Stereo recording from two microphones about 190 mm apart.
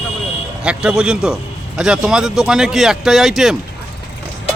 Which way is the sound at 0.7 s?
5° right (ahead or behind).